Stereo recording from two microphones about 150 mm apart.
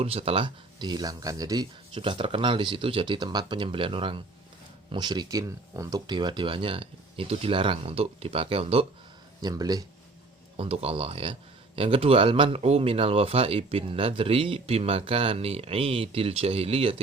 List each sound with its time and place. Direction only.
0.0 s speech: 40° right (ahead or behind); by 1.6 s 25° right (ahead or behind)
1.9 s speech: 35° right (ahead or behind)
9.4 s speech: 25° right (ahead or behind)
10.6 s speech: 40° right (ahead or behind)